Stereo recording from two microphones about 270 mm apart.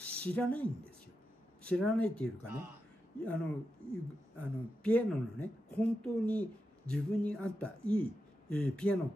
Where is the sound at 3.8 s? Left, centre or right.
Right.